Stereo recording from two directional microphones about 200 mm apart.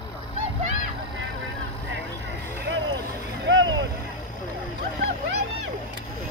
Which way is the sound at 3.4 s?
70° right (ahead or behind).